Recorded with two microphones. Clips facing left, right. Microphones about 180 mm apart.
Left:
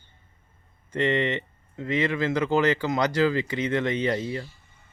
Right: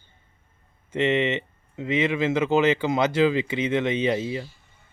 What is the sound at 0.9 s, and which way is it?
Speech, 25° right (ahead or behind).